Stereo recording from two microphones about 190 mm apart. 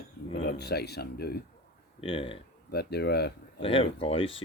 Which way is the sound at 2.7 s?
60° left (ahead or behind).